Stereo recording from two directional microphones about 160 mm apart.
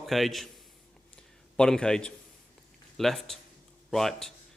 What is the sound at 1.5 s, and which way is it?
A man's voice, 5° left (ahead or behind).